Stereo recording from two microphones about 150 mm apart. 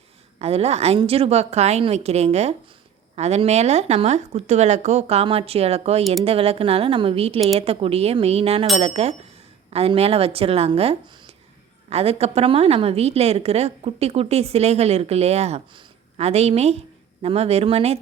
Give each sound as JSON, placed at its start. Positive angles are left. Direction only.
{"t": 0.3, "sound": "a woman's voice", "side_deg": -45}